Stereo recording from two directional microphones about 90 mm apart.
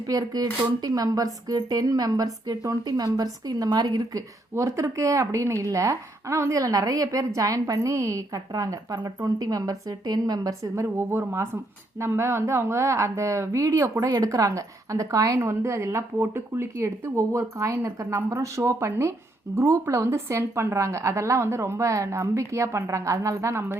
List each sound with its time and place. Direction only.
0.1 s speech: 45° right (ahead or behind)
4.5 s speech: 35° right (ahead or behind)
10.9 s speech: 25° right (ahead or behind)